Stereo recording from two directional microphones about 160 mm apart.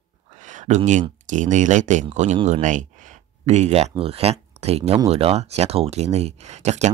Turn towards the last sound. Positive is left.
turn(degrees=-45)  # may be behind; listen again after turning